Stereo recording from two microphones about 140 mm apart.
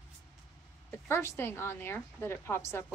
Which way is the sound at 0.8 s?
15° left (ahead or behind).